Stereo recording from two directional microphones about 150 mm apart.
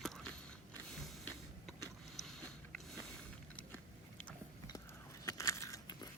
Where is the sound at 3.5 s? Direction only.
10° left (ahead or behind).